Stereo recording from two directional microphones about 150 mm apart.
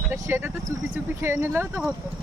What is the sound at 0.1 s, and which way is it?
Speech, 15° right (ahead or behind).